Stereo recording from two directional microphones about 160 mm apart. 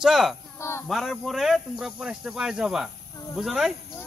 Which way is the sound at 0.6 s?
15° left (ahead or behind).